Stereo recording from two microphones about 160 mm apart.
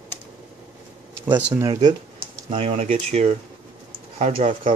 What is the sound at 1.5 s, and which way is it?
Speech, 20° right (ahead or behind).